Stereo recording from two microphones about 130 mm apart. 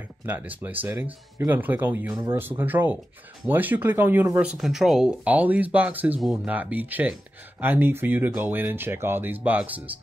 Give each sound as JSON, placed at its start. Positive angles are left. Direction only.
{"t": 0.3, "sound": "speech", "side_deg": -15}